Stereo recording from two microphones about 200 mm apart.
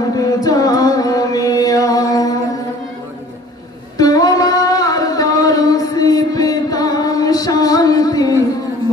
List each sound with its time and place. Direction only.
0.4 s chant: 20° left (ahead or behind)
4.0 s singing: 20° left (ahead or behind)